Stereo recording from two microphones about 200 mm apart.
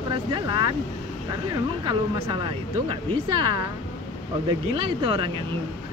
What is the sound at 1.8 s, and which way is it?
Speech, 20° right (ahead or behind).